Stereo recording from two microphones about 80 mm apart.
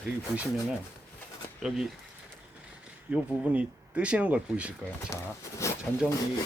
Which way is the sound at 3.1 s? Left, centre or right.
Centre.